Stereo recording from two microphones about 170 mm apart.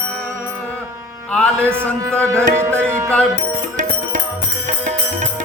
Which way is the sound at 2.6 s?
15° right (ahead or behind).